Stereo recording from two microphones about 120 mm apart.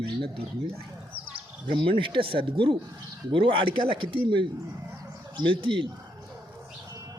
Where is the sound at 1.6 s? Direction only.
45° right (ahead or behind).